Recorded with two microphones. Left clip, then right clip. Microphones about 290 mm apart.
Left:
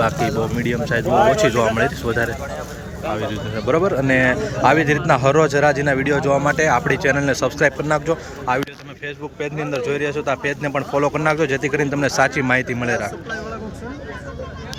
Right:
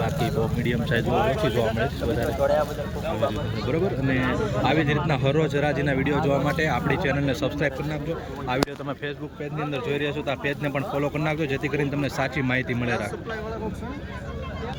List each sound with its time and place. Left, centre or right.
0.6 s a man's voice: centre
1.1 s speech: left
3.7 s a man's voice: centre
9.7 s a man's voice: centre